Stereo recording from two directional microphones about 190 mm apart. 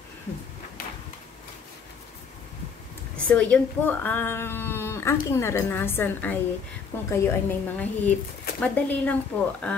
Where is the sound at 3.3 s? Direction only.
5° left (ahead or behind).